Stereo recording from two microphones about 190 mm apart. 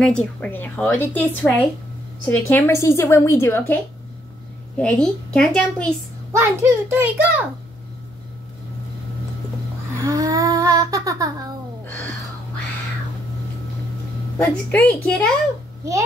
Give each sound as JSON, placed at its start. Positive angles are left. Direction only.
{"t": 0.0, "sound": "a woman's voice", "side_deg": 5}
{"t": 4.7, "sound": "a woman's voice", "side_deg": 5}
{"t": 6.3, "sound": "a child's voice", "side_deg": -15}
{"t": 9.9, "sound": "music", "side_deg": -15}
{"t": 11.8, "sound": "a sound", "side_deg": 10}
{"t": 14.4, "sound": "a woman's voice", "side_deg": 10}